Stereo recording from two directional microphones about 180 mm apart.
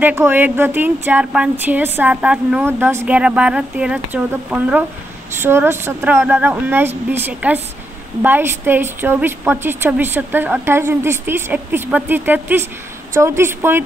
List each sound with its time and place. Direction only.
0.0 s a woman's voice: 10° right (ahead or behind)